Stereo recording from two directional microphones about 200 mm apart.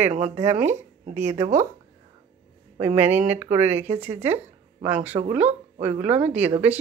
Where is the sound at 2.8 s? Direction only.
10° right (ahead or behind).